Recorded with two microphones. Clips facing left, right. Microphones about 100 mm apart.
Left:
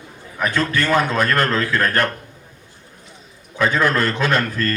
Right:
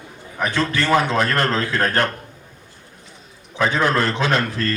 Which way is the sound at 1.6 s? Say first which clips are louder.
Left 1 dB; 30° right (ahead or behind).